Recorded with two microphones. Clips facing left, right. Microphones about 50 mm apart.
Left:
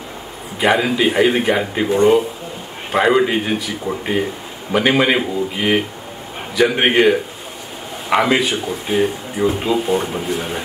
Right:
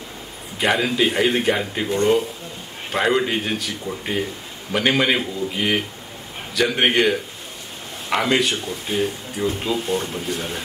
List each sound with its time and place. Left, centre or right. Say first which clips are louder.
0.6 s speech: left 4 dB; centre